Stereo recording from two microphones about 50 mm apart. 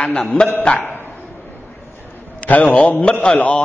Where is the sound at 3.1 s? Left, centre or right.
Centre.